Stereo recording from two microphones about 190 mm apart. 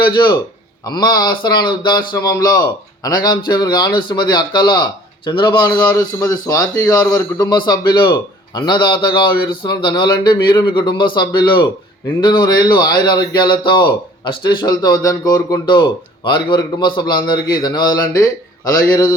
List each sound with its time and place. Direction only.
0.0 s speech: 25° left (ahead or behind)